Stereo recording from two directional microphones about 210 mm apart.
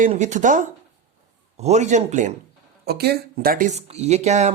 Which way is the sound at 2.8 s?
50° right (ahead or behind).